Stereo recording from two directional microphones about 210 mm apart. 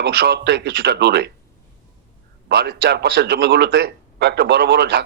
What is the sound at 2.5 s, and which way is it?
A man's voice, 55° right (ahead or behind).